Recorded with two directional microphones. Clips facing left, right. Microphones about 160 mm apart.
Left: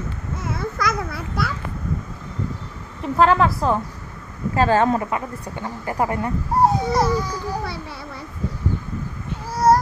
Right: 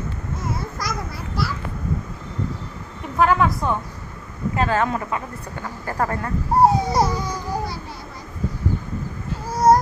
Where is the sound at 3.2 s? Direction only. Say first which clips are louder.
Left 2 dB; 30° left (ahead or behind); by 6.3 s 15° left (ahead or behind).